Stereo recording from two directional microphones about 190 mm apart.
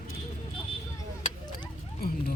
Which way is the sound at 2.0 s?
55° left (ahead or behind).